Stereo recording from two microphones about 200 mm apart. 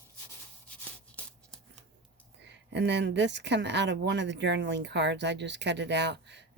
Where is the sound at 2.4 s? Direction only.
60° right (ahead or behind).